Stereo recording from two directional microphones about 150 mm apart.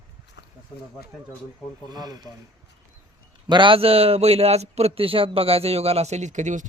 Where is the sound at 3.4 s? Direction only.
30° right (ahead or behind).